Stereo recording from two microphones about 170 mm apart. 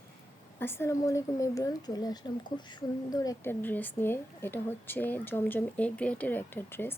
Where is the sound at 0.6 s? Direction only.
15° left (ahead or behind).